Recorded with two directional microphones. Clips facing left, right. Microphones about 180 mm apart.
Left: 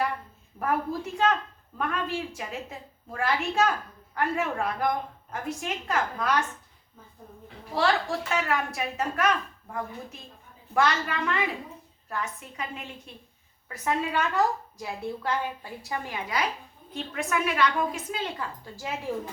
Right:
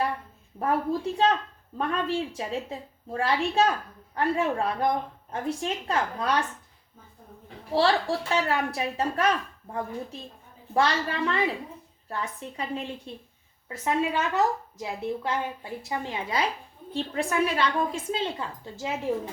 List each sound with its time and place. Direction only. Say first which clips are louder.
0.6 s a woman's voice: right 2 dB; 30° right (ahead or behind)
7.7 s a woman's voice: right 2 dB; 30° right (ahead or behind)
10.8 s a woman's voice: right 1 dB; 30° right (ahead or behind)